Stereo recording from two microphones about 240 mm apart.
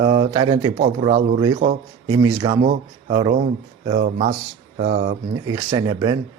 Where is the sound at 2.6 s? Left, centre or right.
Right.